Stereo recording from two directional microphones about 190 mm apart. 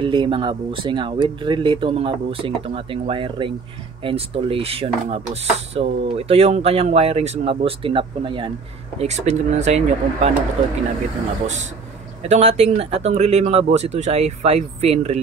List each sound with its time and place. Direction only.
0.0 s speech: 25° right (ahead or behind)
12.2 s speech: 35° right (ahead or behind)